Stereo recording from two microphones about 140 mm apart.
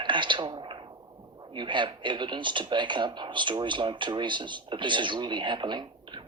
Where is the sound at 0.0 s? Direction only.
35° right (ahead or behind).